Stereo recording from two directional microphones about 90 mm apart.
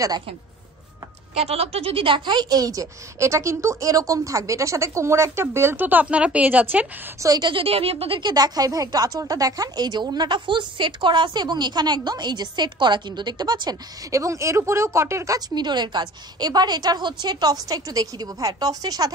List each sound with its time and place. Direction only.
1.6 s a woman's voice: 90° right; by 6.9 s 20° right (ahead or behind)
7.2 s a woman's voice: 40° right (ahead or behind)
7.4 s speech: 85° right
8.3 s a woman's voice: 45° right (ahead or behind)
14.1 s a woman's voice: 35° right (ahead or behind)
15.5 s a woman's voice: 55° right (ahead or behind)